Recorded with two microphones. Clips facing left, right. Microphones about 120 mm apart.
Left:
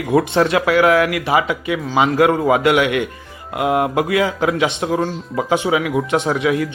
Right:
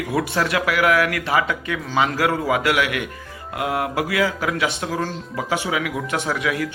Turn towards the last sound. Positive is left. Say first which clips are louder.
# left 6 dB
turn(degrees=25)  # may be behind; listen again after turning